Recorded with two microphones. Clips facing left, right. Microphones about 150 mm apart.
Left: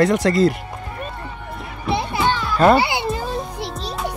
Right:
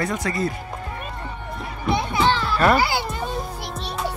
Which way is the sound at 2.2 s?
15° left (ahead or behind).